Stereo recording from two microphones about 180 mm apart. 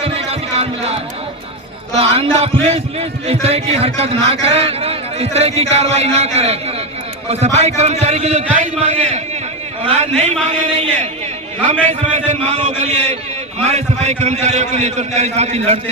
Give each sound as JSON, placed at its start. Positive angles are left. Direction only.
{"t": 0.0, "sound": "music", "side_deg": -35}
{"t": 2.0, "sound": "a man's voice", "side_deg": -35}